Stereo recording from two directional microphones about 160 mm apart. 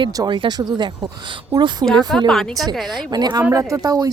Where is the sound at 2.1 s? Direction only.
Centre (ahead or behind).